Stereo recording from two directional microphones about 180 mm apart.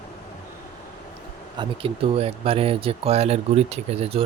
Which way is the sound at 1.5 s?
30° right (ahead or behind).